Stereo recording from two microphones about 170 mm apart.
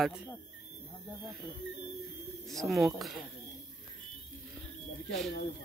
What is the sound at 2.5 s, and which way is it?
Speech, centre (ahead or behind).